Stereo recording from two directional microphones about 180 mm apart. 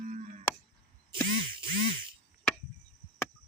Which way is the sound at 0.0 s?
45° right (ahead or behind).